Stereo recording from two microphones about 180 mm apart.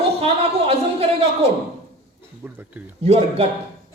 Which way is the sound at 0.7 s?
35° right (ahead or behind).